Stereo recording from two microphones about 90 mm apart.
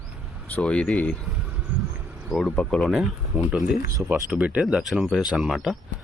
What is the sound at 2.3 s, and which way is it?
Speech, centre (ahead or behind).